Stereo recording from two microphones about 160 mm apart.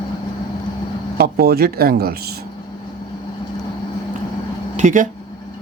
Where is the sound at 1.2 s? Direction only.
75° right (ahead or behind).